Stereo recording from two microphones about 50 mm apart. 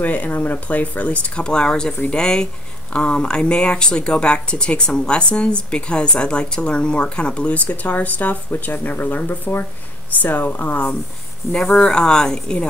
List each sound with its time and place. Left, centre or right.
0.0 s speech: left
11.5 s speech: left